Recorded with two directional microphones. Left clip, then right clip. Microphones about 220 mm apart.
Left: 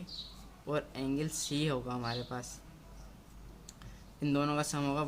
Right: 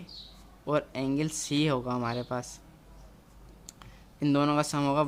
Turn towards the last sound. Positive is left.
turn(degrees=-30)  # may be behind; listen again after turning